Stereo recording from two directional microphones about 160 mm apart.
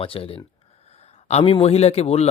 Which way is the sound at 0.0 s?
35° left (ahead or behind).